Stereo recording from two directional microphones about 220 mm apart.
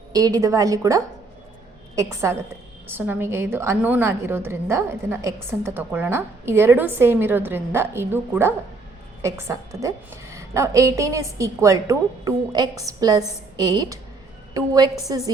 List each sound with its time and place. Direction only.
0.1 s a woman's voice: 15° right (ahead or behind)